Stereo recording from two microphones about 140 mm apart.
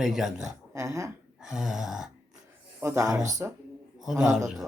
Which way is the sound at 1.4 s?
5° right (ahead or behind).